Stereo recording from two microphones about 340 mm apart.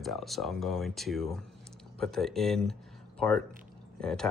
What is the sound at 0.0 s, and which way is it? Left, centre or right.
Speech, centre.